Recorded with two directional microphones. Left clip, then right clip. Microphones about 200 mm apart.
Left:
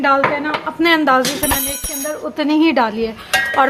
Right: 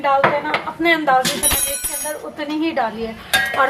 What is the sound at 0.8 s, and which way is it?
Speech, 50° left (ahead or behind).